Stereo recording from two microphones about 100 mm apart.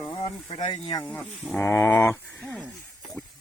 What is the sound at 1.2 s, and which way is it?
Speech, centre (ahead or behind).